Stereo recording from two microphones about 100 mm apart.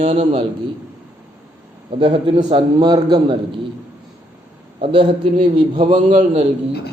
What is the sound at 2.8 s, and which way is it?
Speech, 45° right (ahead or behind).